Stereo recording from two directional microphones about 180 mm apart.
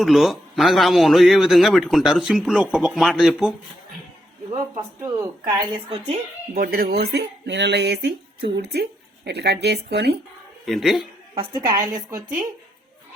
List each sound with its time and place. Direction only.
0.0 s a man's voice: centre (ahead or behind)
5.0 s speech: 15° right (ahead or behind)
6.5 s speech: 55° right (ahead or behind)
10.7 s a man's voice: centre (ahead or behind)
11.3 s a woman's voice: 25° right (ahead or behind)